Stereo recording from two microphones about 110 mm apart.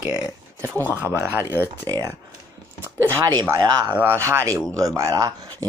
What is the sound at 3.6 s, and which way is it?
Speech, 40° right (ahead or behind).